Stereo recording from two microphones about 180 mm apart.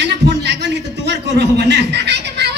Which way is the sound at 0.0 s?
70° right (ahead or behind).